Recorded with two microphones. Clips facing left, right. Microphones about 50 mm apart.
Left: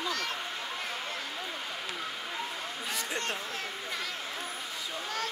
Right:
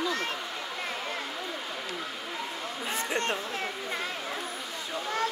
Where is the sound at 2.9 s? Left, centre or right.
Right.